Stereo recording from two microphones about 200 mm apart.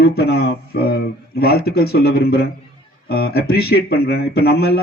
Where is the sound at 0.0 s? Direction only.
50° left (ahead or behind).